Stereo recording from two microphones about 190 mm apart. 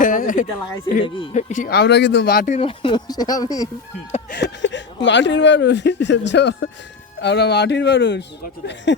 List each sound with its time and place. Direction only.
0.0 s a sound: 45° left (ahead or behind)
1.0 s speech: 25° left (ahead or behind)
1.7 s speech: 65° left (ahead or behind)
2.5 s speech: 30° left (ahead or behind)
4.3 s a sound: 65° left (ahead or behind)
5.0 s speech: 70° left (ahead or behind)